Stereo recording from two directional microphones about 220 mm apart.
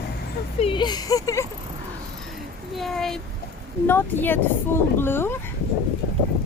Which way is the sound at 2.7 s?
Centre (ahead or behind).